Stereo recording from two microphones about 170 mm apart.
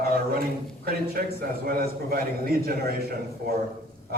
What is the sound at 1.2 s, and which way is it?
A man's voice, 60° right (ahead or behind).